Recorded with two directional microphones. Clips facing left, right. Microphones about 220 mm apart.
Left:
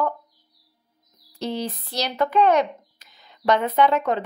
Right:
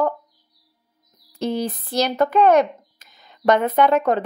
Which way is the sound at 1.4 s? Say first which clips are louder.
Right 4 dB; 50° right (ahead or behind).